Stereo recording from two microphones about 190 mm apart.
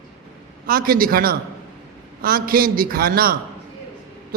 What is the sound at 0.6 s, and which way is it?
A man's voice, 50° right (ahead or behind).